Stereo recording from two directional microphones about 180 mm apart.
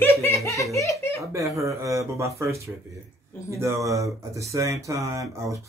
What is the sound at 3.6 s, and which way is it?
Speech, 20° right (ahead or behind).